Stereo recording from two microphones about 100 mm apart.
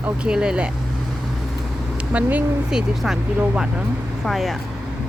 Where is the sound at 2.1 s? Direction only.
15° right (ahead or behind).